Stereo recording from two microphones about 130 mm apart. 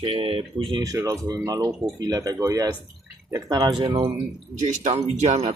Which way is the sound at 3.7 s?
40° right (ahead or behind).